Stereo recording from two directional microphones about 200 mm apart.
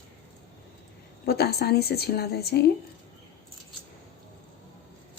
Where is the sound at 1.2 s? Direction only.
50° left (ahead or behind).